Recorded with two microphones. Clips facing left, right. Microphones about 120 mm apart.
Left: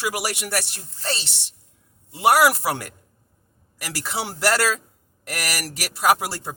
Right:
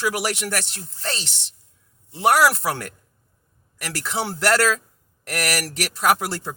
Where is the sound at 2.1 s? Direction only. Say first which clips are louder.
Even; 10° left (ahead or behind).